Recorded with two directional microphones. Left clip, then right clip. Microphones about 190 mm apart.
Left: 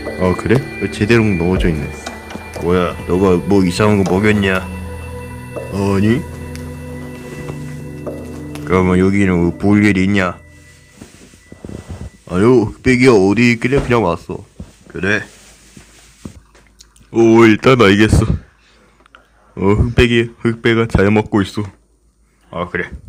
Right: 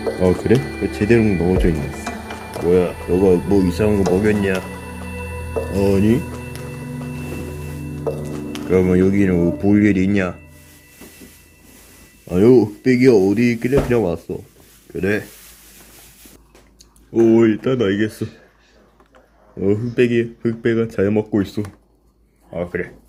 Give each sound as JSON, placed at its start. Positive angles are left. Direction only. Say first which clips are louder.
{"t": 0.2, "sound": "speech", "louder": "left 2 dB", "side_deg": 10}
{"t": 5.9, "sound": "speech", "louder": "left 2 dB", "side_deg": 15}
{"t": 8.5, "sound": "speech", "louder": "left 2 dB", "side_deg": 15}
{"t": 12.3, "sound": "speech", "louder": "left 1 dB", "side_deg": 15}
{"t": 17.1, "sound": "speech", "louder": "left 5 dB", "side_deg": 25}
{"t": 19.5, "sound": "speech", "louder": "left 4 dB", "side_deg": 20}